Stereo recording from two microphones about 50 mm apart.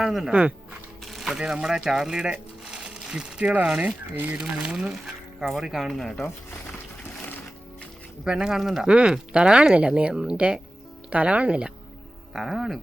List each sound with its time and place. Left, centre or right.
0.0 s speech: centre
0.3 s speech: right
1.0 s a sound: centre
1.4 s speech: centre; by 4.4 s right
4.4 s speech: centre
5.8 s speech: centre
8.2 s speech: centre
8.9 s speech: centre
12.3 s speech: centre